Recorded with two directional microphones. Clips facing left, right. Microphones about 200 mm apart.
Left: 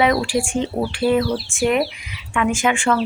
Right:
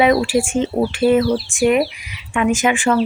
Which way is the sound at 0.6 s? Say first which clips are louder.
Right 4 dB; centre (ahead or behind).